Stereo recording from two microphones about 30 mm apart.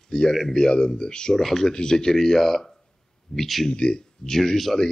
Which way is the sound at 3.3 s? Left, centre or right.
Left.